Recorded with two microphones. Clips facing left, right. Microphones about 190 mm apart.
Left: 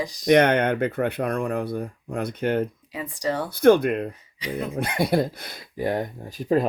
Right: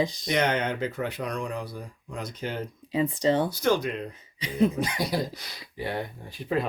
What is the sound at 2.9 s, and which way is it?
Speech, 25° right (ahead or behind).